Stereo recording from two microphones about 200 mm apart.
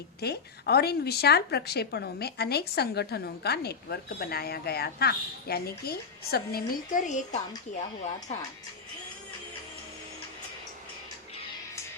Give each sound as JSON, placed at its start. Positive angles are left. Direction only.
{"t": 0.2, "sound": "speech", "side_deg": 55}